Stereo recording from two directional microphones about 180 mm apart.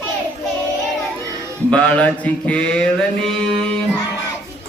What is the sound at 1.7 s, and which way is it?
Mantra, 5° left (ahead or behind).